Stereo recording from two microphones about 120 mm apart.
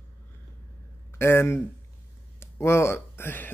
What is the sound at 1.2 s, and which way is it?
Speech, 20° left (ahead or behind).